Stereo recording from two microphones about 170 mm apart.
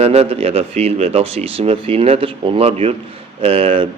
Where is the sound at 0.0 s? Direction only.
35° right (ahead or behind).